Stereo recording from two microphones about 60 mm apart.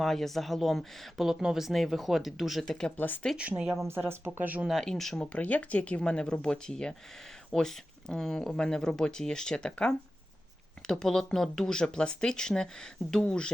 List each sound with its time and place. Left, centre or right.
0.0 s speech: centre
3.3 s speech: centre
3.8 s speech: right
4.4 s speech: right
4.7 s speech: centre
5.3 s speech: left